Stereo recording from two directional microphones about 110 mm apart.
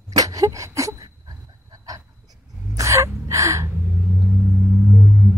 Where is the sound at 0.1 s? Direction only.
35° right (ahead or behind).